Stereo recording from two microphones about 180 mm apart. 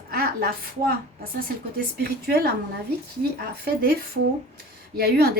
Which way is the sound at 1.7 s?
60° right (ahead or behind).